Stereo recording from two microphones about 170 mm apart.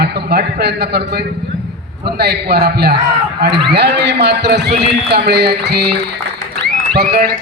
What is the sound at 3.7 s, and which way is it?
A man's voice, 80° right.